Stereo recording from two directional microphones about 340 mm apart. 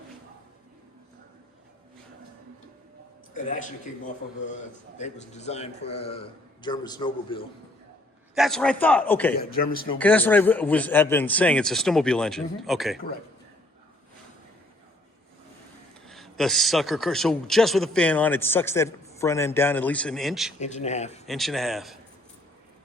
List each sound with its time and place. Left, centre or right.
3.3 s a man's voice: left
8.4 s speech: centre
16.0 s speech: centre
20.6 s a man's voice: centre
21.2 s speech: centre